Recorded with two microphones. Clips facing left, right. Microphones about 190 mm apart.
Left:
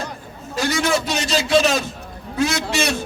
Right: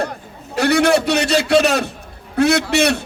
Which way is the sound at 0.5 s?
65° right (ahead or behind).